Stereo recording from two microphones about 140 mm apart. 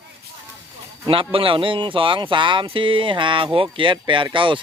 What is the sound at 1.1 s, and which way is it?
Speech, 40° right (ahead or behind).